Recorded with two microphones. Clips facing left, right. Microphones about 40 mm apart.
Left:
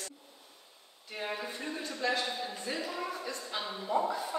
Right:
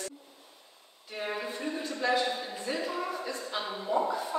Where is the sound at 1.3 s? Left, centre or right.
Centre.